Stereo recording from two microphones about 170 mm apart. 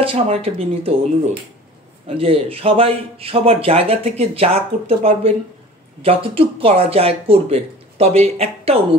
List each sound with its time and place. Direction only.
0.0 s speech: 35° right (ahead or behind)